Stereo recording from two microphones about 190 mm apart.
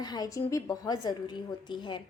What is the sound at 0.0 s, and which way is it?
A woman's voice, 20° left (ahead or behind).